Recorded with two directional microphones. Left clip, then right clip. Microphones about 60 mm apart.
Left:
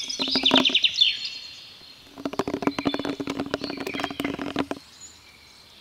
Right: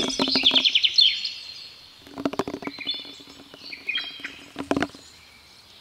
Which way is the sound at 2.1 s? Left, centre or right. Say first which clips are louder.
Even; centre.